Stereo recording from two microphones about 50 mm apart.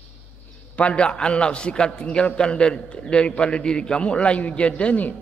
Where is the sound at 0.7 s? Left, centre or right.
Left.